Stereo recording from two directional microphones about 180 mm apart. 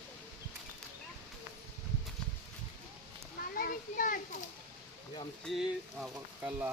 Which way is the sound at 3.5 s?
50° left (ahead or behind).